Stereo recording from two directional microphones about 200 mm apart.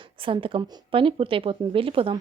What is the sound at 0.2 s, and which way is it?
A woman's voice, 25° right (ahead or behind).